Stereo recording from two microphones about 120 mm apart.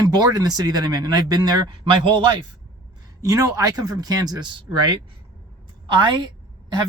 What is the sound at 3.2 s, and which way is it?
Speech, 30° right (ahead or behind).